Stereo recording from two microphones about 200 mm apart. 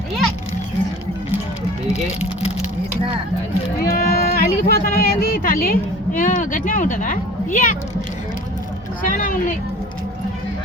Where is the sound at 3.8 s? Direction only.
50° left (ahead or behind).